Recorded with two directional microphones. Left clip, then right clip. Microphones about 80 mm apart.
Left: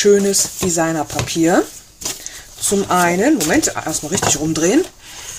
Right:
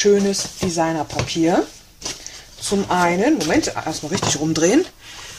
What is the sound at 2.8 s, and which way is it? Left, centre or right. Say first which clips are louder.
Speech: left 2 dB; left.